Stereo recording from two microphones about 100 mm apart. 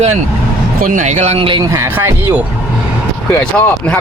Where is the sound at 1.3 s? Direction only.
65° right (ahead or behind).